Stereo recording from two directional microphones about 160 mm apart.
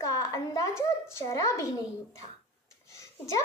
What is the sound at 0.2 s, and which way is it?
A woman's voice, 20° left (ahead or behind).